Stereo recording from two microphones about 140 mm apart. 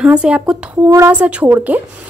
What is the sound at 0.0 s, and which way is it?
Speech, 10° right (ahead or behind).